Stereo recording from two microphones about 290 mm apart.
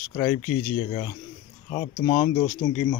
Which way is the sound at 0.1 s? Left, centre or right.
Centre.